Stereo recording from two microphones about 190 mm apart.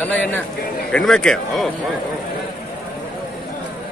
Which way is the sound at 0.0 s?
10° left (ahead or behind).